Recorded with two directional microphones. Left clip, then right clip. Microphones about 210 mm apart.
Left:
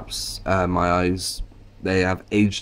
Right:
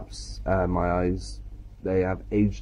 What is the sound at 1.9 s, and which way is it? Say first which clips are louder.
Speech: left 4 dB; 70° left (ahead or behind).